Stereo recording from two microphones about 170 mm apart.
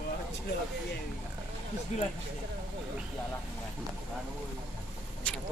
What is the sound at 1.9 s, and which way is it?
Speech, 40° left (ahead or behind).